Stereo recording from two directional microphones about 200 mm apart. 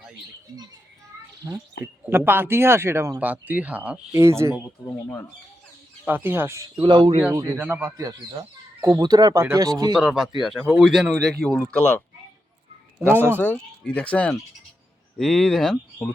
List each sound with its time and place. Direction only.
1.4 s speech: 15° right (ahead or behind)
6.1 s speech: 10° right (ahead or behind)
6.8 s speech: 25° right (ahead or behind)
7.2 s speech: 10° right (ahead or behind)
10.0 s speech: centre (ahead or behind)
13.1 s speech: 10° right (ahead or behind)
13.4 s speech: 5° left (ahead or behind)